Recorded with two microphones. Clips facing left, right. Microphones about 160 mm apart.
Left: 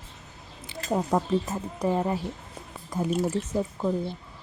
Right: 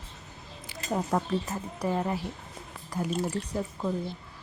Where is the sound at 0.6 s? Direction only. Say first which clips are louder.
Left 3 dB; 20° left (ahead or behind).